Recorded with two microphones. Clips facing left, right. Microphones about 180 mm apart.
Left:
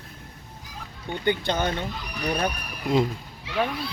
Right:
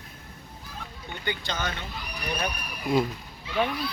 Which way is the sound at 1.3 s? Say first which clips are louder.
Left 7 dB; 55° left (ahead or behind).